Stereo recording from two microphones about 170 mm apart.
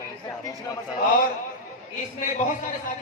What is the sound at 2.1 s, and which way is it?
Speech, 50° left (ahead or behind).